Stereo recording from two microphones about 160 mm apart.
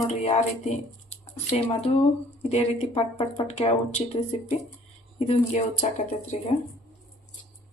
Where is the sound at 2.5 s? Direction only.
40° left (ahead or behind).